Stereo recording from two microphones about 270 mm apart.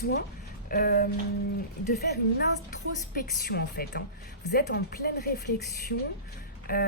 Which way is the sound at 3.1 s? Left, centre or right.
Left.